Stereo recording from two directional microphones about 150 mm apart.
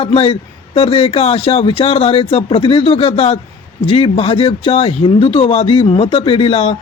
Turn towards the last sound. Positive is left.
turn(degrees=40)  # may be behind; listen again after turning